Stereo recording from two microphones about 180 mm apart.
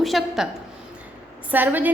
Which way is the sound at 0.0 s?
Centre (ahead or behind).